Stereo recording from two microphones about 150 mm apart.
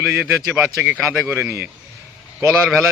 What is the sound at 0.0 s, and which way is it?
Speech, 10° right (ahead or behind).